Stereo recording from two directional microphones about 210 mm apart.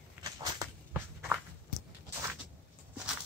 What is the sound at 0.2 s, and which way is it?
Walk, 15° right (ahead or behind).